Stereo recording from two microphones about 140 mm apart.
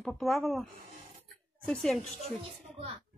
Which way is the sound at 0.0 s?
Centre (ahead or behind).